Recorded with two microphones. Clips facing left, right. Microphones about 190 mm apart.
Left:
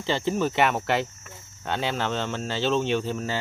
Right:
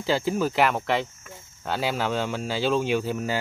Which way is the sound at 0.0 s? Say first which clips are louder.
Right 1 dB; 5° right (ahead or behind).